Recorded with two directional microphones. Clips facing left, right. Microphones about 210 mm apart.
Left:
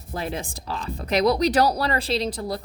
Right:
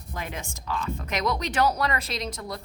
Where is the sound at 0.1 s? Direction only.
35° left (ahead or behind).